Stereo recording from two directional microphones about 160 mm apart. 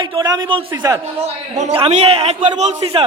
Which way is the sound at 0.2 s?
25° right (ahead or behind).